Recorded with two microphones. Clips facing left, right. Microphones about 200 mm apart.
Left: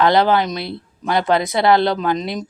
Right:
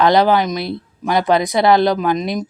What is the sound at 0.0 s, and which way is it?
Speech, 15° right (ahead or behind).